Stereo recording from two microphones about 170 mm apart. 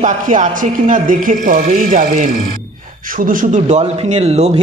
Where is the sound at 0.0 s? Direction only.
50° right (ahead or behind).